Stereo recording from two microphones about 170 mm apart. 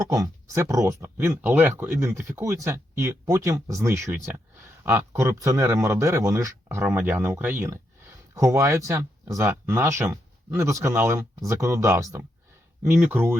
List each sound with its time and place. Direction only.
0.1 s speech: 20° right (ahead or behind)